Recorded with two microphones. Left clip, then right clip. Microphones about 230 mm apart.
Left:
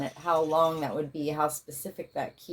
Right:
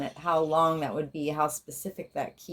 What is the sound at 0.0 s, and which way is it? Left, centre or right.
Speech, right.